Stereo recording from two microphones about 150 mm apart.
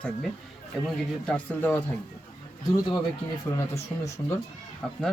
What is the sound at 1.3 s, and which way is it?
Speech, 10° left (ahead or behind).